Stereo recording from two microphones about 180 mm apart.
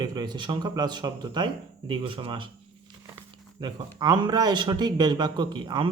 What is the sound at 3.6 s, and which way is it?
Speech, 25° right (ahead or behind).